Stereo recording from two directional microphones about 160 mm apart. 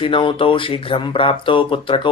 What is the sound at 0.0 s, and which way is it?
Speech, 35° left (ahead or behind).